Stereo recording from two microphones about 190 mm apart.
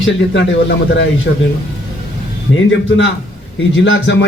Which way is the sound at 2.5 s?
85° left.